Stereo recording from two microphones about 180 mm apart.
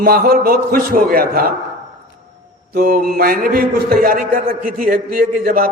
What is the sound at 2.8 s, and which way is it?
A man's voice, 55° right (ahead or behind).